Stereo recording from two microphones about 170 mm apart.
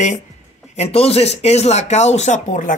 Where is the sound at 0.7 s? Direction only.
35° left (ahead or behind).